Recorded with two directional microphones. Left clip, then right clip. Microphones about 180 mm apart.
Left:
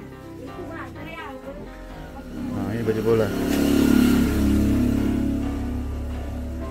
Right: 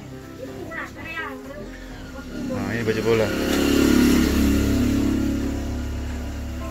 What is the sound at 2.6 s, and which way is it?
Speech, 15° left (ahead or behind).